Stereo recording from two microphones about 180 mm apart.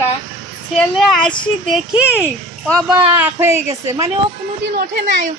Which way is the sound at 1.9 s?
5° right (ahead or behind).